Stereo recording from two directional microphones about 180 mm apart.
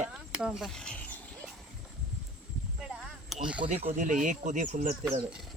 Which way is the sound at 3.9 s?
45° right (ahead or behind).